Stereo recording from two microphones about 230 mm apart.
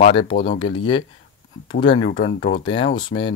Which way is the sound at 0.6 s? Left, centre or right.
Left.